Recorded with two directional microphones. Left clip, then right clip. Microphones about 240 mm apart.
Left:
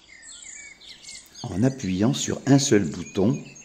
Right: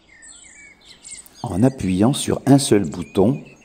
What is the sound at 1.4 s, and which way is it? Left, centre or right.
Speech, centre.